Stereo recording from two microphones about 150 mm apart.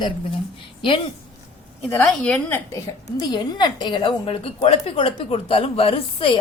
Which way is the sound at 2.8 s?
25° left (ahead or behind).